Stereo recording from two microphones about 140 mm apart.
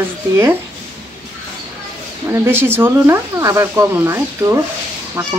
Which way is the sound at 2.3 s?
15° right (ahead or behind).